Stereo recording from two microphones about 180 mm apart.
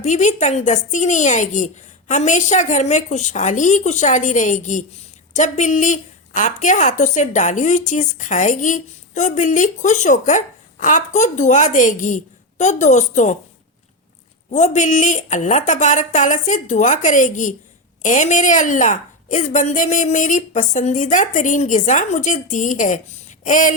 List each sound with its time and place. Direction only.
0.0 s a woman's voice: 40° left (ahead or behind)
14.5 s a woman's voice: 40° left (ahead or behind)
23.4 s a sound: 45° left (ahead or behind)